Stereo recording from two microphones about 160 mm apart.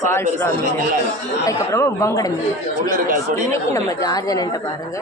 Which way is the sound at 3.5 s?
20° left (ahead or behind).